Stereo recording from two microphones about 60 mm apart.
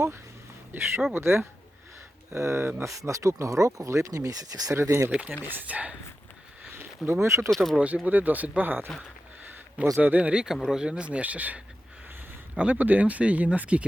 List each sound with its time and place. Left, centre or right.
0.7 s speech: right
2.8 s speech: right
4.7 s speech: right
5.3 s speech: right
6.7 s speech: right
7.5 s speech: centre
7.8 s speech: right
10.0 s speech: right